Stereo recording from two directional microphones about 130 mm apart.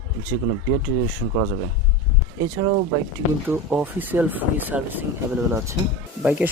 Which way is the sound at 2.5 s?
30° right (ahead or behind).